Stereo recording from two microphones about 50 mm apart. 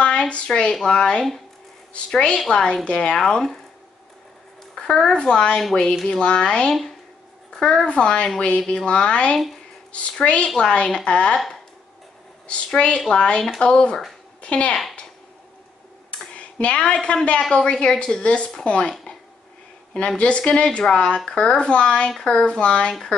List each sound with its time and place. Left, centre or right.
0.3 s a woman's voice: centre
3.2 s a woman's voice: centre
4.7 s a woman's voice: centre
11.3 s speech: centre
12.4 s a woman's voice: left
16.3 s a woman's voice: left
20.2 s a woman's voice: left